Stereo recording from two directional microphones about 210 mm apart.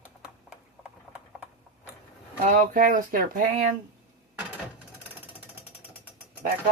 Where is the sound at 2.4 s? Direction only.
40° right (ahead or behind).